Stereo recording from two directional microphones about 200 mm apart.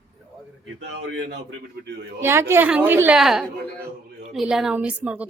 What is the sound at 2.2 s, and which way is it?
A woman's voice, 10° right (ahead or behind).